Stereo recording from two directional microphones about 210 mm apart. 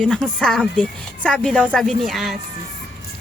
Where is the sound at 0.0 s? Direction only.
5° left (ahead or behind).